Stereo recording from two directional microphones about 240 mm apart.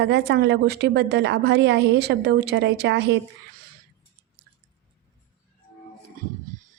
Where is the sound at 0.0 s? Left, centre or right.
Right.